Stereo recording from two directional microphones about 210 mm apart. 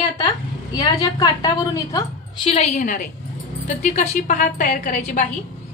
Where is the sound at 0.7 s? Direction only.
15° left (ahead or behind).